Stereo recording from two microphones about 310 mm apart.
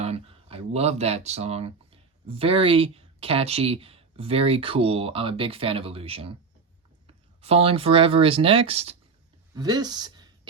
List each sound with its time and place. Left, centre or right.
0.0 s speech: centre